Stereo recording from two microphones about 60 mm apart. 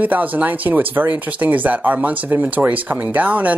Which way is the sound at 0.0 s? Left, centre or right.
Right.